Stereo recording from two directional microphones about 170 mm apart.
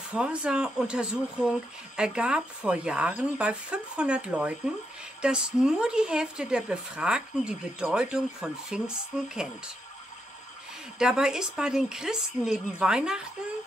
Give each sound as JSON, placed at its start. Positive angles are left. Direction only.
{"t": 0.1, "sound": "speech", "side_deg": -5}
{"t": 11.0, "sound": "speech", "side_deg": -5}